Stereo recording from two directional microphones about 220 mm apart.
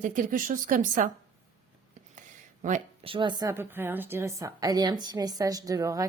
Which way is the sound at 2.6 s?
30° right (ahead or behind).